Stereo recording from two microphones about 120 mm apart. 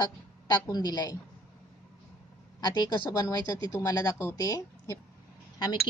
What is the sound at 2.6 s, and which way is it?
A woman's voice, 35° left (ahead or behind).